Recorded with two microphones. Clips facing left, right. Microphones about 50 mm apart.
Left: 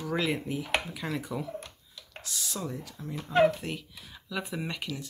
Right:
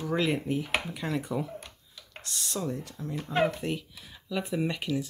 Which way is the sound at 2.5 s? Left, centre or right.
Centre.